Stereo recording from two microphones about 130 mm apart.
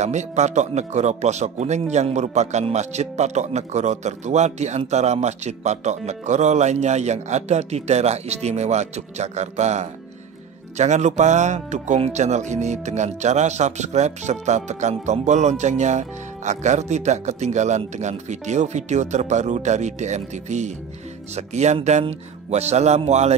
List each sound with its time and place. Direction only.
0.0 s speech: 60° right (ahead or behind)